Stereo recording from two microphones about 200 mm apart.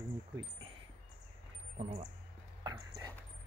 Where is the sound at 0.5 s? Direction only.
25° right (ahead or behind).